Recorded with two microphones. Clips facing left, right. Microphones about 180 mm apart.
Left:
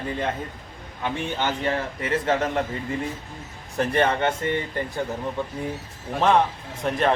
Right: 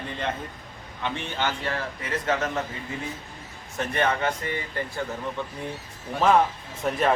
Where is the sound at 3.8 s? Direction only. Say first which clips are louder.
Left 4 dB; 30° left (ahead or behind).